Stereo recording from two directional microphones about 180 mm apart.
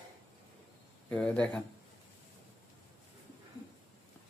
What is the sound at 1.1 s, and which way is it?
Speech, 5° left (ahead or behind).